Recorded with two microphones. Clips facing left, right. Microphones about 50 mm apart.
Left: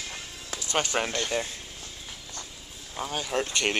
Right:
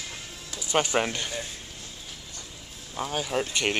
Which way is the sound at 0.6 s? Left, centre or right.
Centre.